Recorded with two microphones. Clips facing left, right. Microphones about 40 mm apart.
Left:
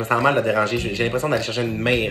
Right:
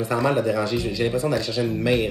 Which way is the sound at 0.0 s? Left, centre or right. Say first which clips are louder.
Left 3 dB; left.